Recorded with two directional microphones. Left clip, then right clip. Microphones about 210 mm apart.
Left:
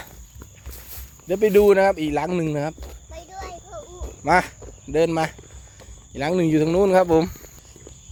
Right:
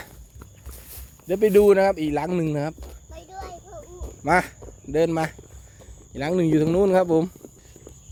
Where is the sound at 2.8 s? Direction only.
Centre (ahead or behind).